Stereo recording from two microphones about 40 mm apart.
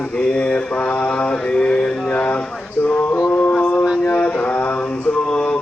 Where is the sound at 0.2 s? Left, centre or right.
Left.